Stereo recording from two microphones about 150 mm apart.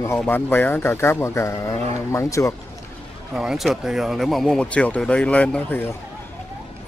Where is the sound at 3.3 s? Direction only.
Centre (ahead or behind); by 5.9 s 15° left (ahead or behind).